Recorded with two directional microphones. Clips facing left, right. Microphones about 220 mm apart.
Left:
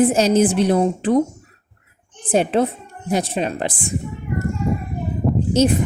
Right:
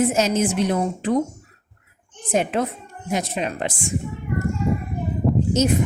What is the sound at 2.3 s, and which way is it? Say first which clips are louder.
A woman's voice: left 4 dB; 30° left (ahead or behind).